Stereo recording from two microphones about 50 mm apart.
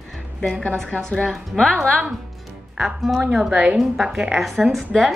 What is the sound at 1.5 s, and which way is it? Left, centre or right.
Speech, centre.